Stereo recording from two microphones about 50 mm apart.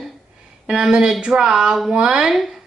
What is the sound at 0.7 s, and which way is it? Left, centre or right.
Speech, centre.